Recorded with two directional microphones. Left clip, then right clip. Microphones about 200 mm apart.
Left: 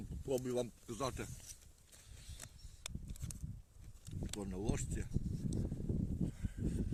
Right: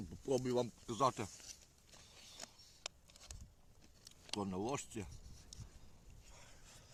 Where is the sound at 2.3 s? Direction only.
Centre (ahead or behind).